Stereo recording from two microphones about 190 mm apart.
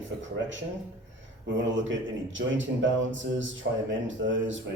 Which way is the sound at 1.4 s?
80° right.